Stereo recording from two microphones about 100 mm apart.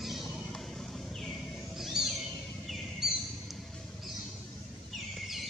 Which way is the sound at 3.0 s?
5° right (ahead or behind).